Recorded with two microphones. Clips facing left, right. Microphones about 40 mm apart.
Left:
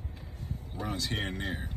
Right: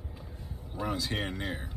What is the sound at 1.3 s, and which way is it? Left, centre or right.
Speech, left.